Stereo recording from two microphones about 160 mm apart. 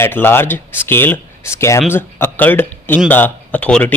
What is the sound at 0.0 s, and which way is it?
Speech, 15° left (ahead or behind).